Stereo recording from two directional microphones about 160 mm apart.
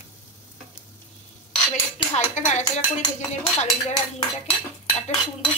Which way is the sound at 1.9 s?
45° left (ahead or behind).